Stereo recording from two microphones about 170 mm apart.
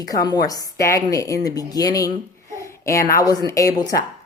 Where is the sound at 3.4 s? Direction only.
20° left (ahead or behind).